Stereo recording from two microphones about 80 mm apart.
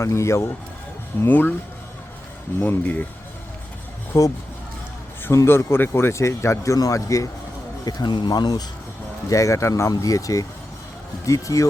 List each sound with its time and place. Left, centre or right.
0.0 s speech: left
1.2 s speech: left
2.6 s speech: left
4.1 s speech: left
5.3 s speech: left
7.9 s speech: left
9.3 s speech: left